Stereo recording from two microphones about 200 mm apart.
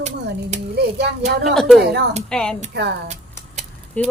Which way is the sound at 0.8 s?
55° right (ahead or behind).